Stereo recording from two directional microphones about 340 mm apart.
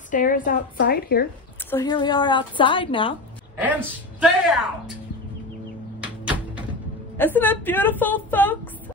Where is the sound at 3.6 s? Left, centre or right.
Centre.